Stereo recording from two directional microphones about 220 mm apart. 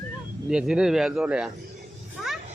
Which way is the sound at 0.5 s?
5° right (ahead or behind).